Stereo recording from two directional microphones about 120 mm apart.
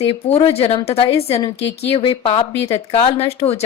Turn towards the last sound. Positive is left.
turn(degrees=60)  # may be behind; listen again after turning